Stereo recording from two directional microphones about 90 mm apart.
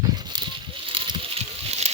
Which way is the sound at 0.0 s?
50° right (ahead or behind).